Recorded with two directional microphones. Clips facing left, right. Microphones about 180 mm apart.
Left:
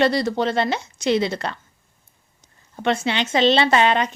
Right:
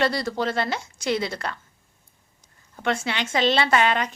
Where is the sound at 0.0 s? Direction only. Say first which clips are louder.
Left 5 dB; 20° left (ahead or behind).